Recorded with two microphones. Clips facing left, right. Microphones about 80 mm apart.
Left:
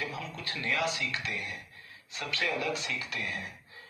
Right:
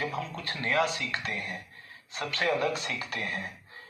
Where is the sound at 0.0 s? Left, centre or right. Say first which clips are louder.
Right 4 dB; right.